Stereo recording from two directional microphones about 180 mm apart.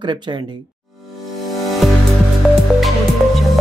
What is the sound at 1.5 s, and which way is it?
Music, centre (ahead or behind).